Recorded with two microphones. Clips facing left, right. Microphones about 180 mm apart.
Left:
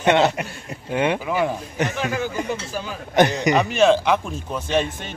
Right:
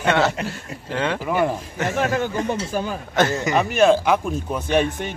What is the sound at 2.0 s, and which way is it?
Speech, 55° right (ahead or behind).